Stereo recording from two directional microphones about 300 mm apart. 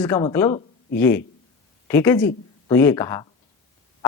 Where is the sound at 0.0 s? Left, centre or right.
Centre.